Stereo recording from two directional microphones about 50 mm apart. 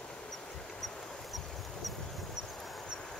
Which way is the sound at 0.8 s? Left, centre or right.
Centre.